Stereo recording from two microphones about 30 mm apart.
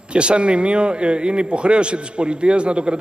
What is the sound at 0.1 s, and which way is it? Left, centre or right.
A man's voice, right.